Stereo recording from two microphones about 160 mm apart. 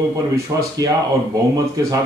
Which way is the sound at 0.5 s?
20° right (ahead or behind).